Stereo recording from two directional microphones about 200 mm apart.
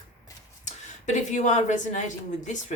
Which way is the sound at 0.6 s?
35° left (ahead or behind).